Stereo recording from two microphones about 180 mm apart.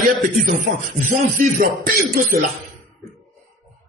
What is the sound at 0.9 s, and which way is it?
Speech, 50° right (ahead or behind).